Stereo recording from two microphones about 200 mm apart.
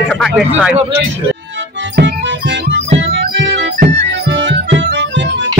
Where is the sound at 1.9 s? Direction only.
60° right (ahead or behind).